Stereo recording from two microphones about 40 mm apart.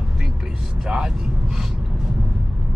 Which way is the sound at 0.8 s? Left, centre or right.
Centre.